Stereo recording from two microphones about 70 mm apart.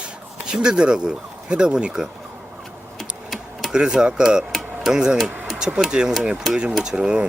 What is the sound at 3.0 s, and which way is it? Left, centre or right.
Typing, centre.